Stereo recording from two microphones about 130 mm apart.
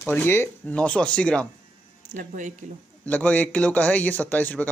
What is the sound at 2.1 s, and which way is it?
Speech, 75° right (ahead or behind).